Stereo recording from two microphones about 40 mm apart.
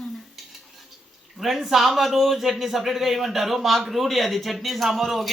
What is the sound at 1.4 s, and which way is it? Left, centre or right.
A man's voice, centre.